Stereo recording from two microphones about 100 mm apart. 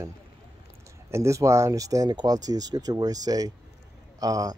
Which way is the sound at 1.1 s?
30° right (ahead or behind).